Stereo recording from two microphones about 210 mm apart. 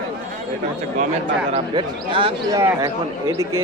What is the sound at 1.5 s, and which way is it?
Speech, 25° right (ahead or behind).